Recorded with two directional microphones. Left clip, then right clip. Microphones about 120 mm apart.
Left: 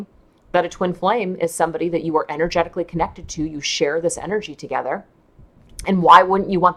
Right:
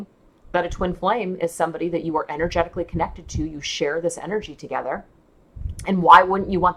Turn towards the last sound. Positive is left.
turn(degrees=45)  # may be behind; listen again after turning